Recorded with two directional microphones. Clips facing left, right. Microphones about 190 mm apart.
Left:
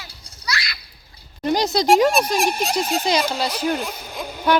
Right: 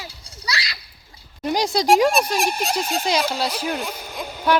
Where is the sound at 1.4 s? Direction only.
10° right (ahead or behind).